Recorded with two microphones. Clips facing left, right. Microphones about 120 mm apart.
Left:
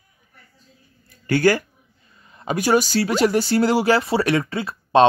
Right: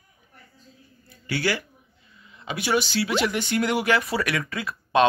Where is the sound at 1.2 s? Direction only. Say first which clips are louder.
Left 9 dB; 45° left (ahead or behind).